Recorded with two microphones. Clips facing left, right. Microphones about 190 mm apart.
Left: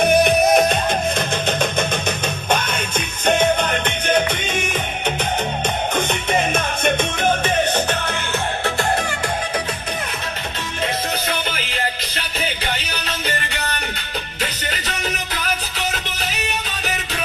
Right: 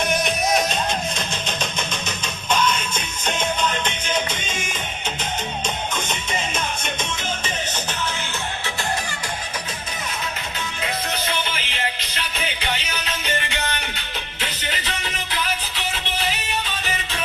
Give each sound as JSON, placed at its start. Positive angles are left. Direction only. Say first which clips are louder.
{"t": 0.0, "sound": "music", "louder": "left 8 dB", "side_deg": 60}
{"t": 2.0, "sound": "music", "louder": "left 5 dB", "side_deg": 60}
{"t": 5.9, "sound": "music", "louder": "left 7 dB", "side_deg": 60}
{"t": 11.3, "sound": "music", "louder": "left 2 dB", "side_deg": 40}
{"t": 13.2, "sound": "music", "louder": "right 1 dB", "side_deg": 40}